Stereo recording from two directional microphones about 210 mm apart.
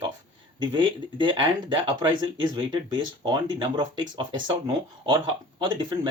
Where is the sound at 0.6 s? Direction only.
20° right (ahead or behind).